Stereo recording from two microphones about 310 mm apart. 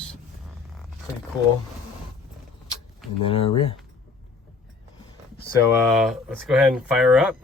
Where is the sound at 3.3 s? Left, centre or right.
Centre.